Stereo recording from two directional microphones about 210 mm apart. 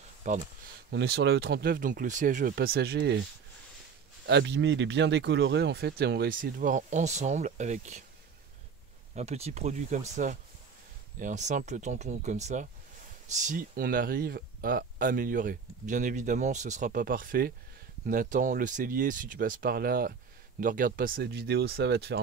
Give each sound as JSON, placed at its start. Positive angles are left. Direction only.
{"t": 0.2, "sound": "speech", "side_deg": -35}
{"t": 0.9, "sound": "speech", "side_deg": -50}
{"t": 4.3, "sound": "speech", "side_deg": -55}
{"t": 9.1, "sound": "speech", "side_deg": -30}